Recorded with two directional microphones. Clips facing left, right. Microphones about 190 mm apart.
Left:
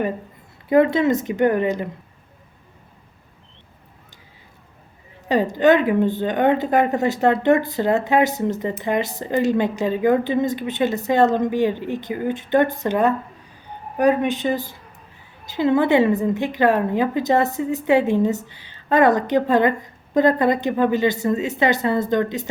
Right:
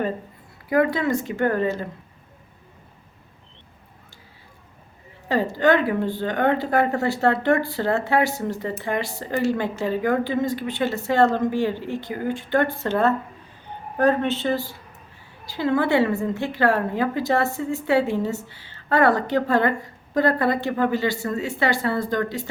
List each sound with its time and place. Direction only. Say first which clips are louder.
0.7 s speech: left 4 dB; 25° left (ahead or behind)
5.3 s speech: left 3 dB; 20° left (ahead or behind)